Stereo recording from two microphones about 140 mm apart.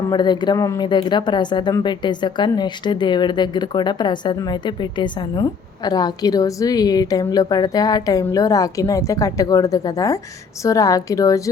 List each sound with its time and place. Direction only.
0.1 s speech: 30° left (ahead or behind)